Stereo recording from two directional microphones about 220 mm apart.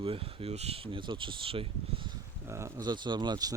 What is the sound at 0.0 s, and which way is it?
Speech, 25° right (ahead or behind).